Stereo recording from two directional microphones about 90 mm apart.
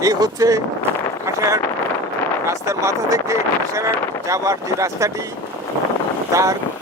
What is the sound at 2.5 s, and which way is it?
Speech, 35° right (ahead or behind).